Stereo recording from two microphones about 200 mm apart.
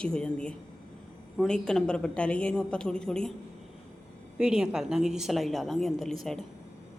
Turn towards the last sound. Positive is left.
turn(degrees=0)  # may be behind; listen again after turning